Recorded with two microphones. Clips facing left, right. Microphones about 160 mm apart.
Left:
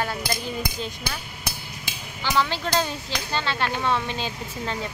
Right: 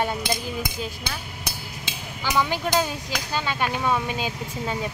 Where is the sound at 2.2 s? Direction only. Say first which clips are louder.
Right 1 dB; 15° right (ahead or behind).